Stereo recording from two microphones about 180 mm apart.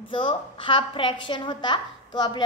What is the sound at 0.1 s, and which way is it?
A child's voice, 30° left (ahead or behind).